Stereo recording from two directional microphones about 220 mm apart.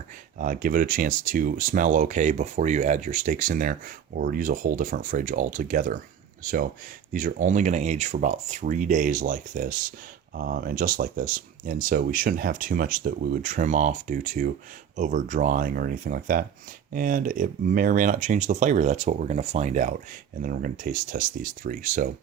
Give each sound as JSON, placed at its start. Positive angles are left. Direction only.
{"t": 0.3, "sound": "speech", "side_deg": -40}